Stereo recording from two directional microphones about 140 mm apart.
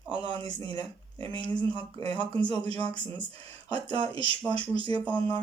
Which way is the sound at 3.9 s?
40° right (ahead or behind).